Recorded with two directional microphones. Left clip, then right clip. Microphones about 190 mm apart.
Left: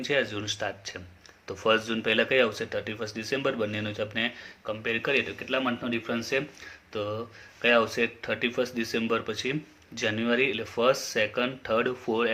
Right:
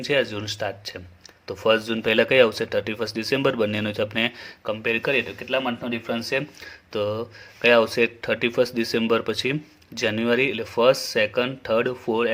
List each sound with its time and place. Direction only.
0.0 s speech: 40° right (ahead or behind)